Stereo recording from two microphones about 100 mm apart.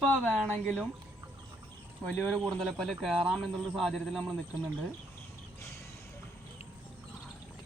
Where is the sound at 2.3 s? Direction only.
5° left (ahead or behind).